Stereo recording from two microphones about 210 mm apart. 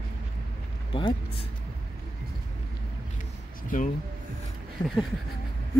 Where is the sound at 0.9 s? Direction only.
25° left (ahead or behind).